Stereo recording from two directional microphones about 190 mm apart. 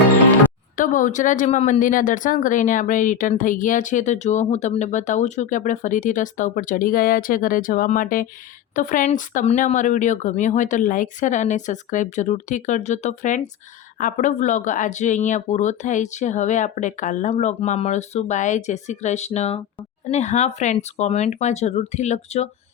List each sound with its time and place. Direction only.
0.8 s speech: 45° left (ahead or behind)